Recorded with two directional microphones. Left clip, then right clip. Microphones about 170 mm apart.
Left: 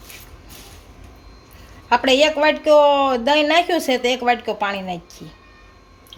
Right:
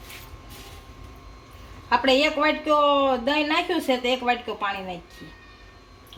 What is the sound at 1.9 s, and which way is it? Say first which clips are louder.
A woman's voice: left 5 dB; 65° left (ahead or behind).